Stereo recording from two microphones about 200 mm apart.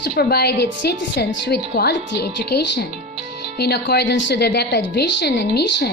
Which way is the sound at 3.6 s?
55° left (ahead or behind).